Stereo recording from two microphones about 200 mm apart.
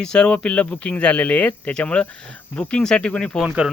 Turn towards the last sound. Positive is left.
turn(degrees=-5)  # may be behind; listen again after turning